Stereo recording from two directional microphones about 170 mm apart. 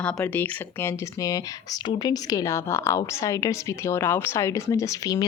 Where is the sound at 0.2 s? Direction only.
10° left (ahead or behind).